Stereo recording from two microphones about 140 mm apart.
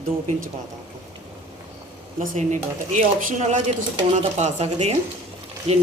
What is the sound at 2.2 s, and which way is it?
Speech, 60° right (ahead or behind).